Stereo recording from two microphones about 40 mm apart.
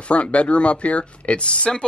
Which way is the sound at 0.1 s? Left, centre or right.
Left.